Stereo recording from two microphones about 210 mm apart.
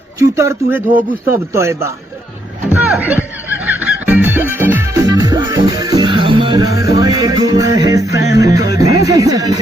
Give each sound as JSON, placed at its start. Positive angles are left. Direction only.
{"t": 0.2, "sound": "speech", "side_deg": -15}
{"t": 3.7, "sound": "music", "side_deg": -10}